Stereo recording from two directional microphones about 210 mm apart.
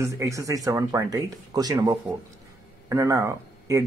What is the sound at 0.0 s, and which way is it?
Speech, 15° right (ahead or behind).